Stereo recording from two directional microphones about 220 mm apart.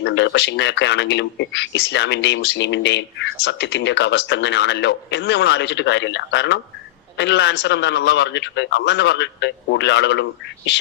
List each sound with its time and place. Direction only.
0.0 s speech: 55° left (ahead or behind)